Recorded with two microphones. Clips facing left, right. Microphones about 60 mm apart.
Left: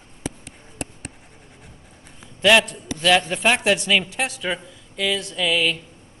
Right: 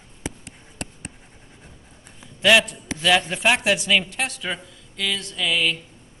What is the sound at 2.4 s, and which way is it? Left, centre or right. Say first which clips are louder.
A man's voice: left 1 dB; centre.